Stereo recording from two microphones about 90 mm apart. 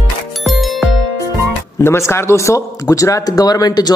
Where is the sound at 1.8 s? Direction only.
30° left (ahead or behind); by 3.9 s 45° left (ahead or behind).